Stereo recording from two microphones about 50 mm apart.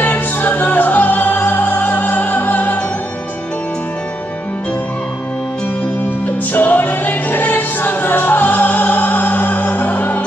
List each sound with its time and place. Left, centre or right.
0.0 s music: left
6.2 s music: left